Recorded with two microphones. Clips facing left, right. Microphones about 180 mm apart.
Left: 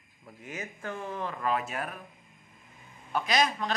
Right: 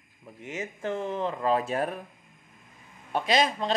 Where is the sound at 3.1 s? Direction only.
25° right (ahead or behind).